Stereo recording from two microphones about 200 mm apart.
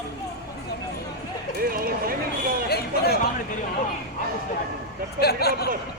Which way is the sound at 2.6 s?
50° left (ahead or behind).